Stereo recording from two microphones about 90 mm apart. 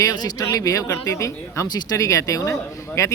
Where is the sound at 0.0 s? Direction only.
45° left (ahead or behind).